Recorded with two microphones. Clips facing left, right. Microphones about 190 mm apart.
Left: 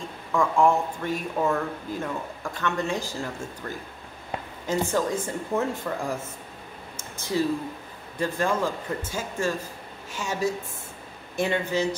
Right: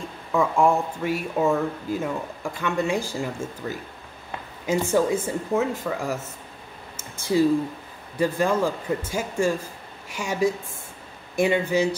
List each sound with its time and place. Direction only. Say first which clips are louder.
0.3 s speech: right 1 dB; 5° right (ahead or behind)
7.2 s speech: right 6 dB; 10° right (ahead or behind)